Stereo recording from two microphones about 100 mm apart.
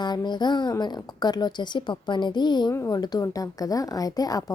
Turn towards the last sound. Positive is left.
turn(degrees=40)  # may be behind; listen again after turning